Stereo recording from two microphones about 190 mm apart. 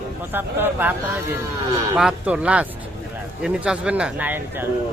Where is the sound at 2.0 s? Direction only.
5° right (ahead or behind).